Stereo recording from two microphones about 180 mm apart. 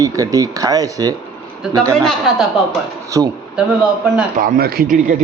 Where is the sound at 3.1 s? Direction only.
20° right (ahead or behind).